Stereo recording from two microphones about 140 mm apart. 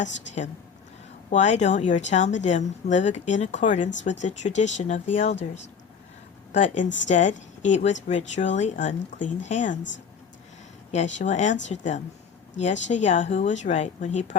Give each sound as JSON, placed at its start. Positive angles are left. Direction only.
{"t": 1.3, "sound": "speech", "side_deg": 55}
{"t": 10.9, "sound": "speech", "side_deg": 55}